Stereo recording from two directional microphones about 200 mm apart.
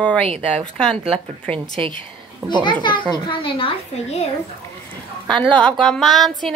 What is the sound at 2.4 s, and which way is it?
Speech, 15° right (ahead or behind).